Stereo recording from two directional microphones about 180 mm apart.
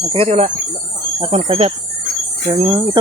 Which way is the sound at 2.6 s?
20° right (ahead or behind).